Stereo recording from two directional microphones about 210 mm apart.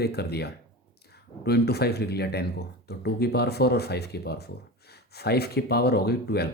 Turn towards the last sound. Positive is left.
turn(degrees=50)  # may be behind; listen again after turning